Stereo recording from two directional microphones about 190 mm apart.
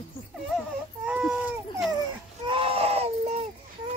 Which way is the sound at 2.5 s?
30° right (ahead or behind).